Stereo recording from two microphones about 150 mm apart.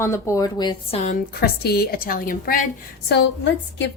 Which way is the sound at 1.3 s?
90° left.